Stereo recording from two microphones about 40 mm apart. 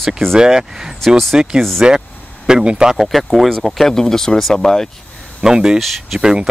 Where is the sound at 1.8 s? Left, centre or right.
Centre.